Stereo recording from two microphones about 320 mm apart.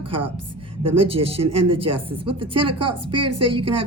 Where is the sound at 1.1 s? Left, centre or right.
Centre.